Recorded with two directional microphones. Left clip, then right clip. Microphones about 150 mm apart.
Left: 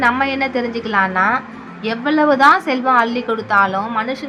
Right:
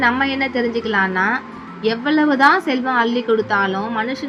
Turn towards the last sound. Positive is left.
turn(degrees=-5)  # may be behind; listen again after turning